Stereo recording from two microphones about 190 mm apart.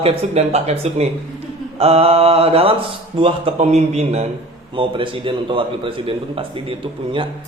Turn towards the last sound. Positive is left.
turn(degrees=-25)  # may be behind; listen again after turning